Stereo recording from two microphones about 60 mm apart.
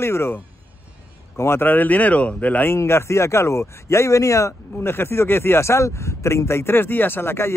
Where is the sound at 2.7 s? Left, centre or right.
Left.